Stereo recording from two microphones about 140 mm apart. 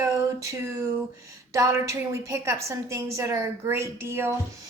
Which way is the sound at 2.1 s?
20° right (ahead or behind).